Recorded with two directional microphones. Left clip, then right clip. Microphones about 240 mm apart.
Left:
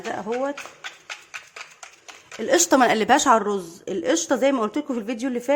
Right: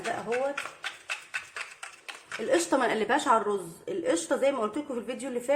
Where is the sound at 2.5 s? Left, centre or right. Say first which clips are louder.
Left 8 dB; left.